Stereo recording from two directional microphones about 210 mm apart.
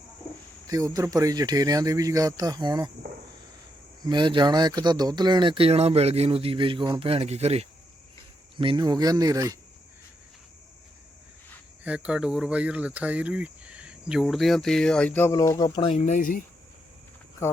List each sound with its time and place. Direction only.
0.7 s speech: 15° right (ahead or behind)
4.0 s speech: 20° right (ahead or behind)
11.8 s speech: 5° right (ahead or behind); by 16.4 s 40° left (ahead or behind)